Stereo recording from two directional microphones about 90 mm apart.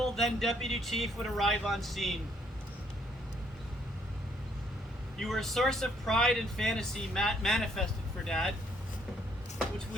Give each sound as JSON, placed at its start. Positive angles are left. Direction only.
{"t": 0.0, "sound": "speech", "side_deg": 5}
{"t": 5.2, "sound": "speech", "side_deg": 0}